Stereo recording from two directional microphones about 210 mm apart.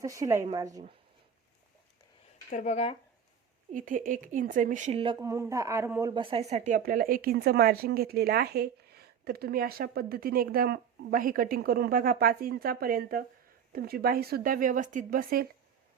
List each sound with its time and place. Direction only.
0.0 s speech: 15° right (ahead or behind)
2.5 s speech: 35° left (ahead or behind)
3.7 s speech: 40° right (ahead or behind)
5.2 s speech: 15° right (ahead or behind); by 15.4 s 45° right (ahead or behind)